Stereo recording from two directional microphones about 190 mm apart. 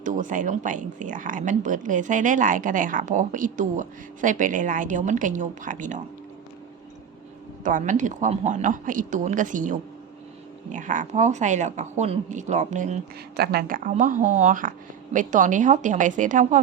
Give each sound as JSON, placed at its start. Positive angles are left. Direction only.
{"t": 0.0, "sound": "speech", "side_deg": -40}
{"t": 7.6, "sound": "speech", "side_deg": -40}
{"t": 13.3, "sound": "speech", "side_deg": -55}